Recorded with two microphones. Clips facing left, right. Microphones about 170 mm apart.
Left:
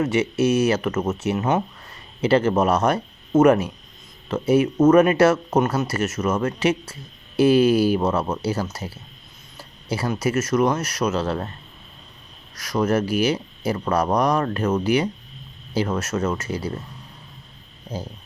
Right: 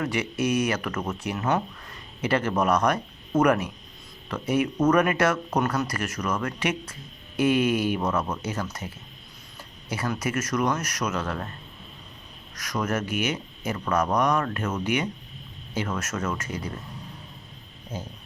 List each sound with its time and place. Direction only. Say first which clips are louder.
0.0 s speech: left 7 dB; 25° left (ahead or behind)
12.5 s speech: left 7 dB; 30° left (ahead or behind)
17.9 s speech: left 4 dB; 35° left (ahead or behind)